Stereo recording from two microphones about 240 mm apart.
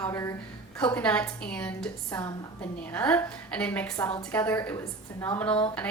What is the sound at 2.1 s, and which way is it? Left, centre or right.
Speech, centre.